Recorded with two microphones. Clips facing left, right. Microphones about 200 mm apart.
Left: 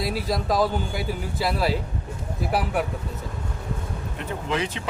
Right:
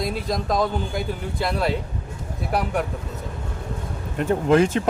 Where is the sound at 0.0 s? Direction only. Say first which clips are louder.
Right 1 dB; 5° left (ahead or behind).